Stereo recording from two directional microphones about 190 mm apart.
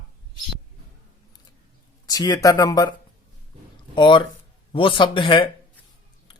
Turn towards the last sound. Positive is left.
turn(degrees=25)  # may be behind; listen again after turning